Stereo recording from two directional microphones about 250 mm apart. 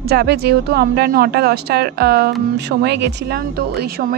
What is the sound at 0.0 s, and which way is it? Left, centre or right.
Speech, right.